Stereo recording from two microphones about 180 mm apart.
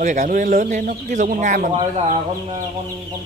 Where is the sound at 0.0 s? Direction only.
45° right (ahead or behind).